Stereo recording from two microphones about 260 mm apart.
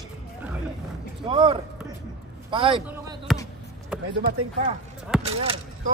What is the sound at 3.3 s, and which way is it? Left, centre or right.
Basketball bounce, centre.